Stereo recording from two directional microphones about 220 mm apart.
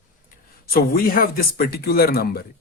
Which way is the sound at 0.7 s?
40° left (ahead or behind).